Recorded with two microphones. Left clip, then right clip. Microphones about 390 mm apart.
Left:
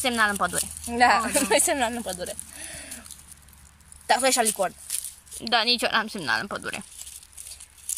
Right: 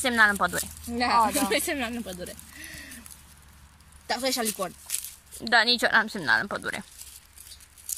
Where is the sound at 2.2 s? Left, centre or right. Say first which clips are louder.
Left 4 dB; centre.